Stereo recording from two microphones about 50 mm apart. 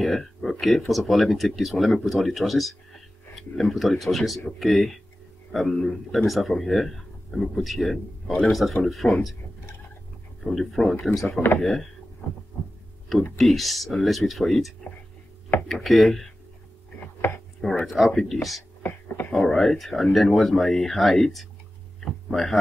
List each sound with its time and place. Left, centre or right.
0.0 s speech: centre
10.4 s speech: centre
13.4 s speech: centre
15.7 s speech: centre
17.8 s speech: centre
18.8 s a sound: left
19.5 s speech: centre